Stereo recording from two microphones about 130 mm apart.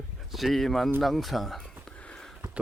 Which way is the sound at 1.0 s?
Centre (ahead or behind).